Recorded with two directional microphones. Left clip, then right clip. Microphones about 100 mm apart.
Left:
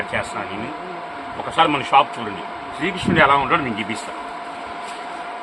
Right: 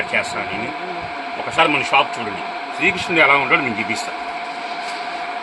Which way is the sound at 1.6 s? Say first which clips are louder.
Left 1 dB; 25° left (ahead or behind).